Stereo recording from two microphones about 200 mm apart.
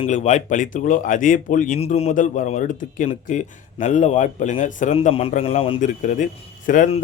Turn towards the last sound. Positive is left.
turn(degrees=40)  # may be behind; listen again after turning